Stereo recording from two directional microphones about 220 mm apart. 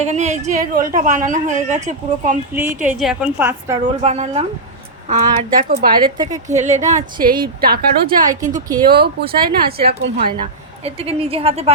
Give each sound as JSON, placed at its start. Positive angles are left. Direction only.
{"t": 0.0, "sound": "a woman's voice", "side_deg": -30}
{"t": 2.6, "sound": "a woman's voice", "side_deg": -5}
{"t": 4.0, "sound": "a woman's voice", "side_deg": -30}
{"t": 10.2, "sound": "a woman's voice", "side_deg": -25}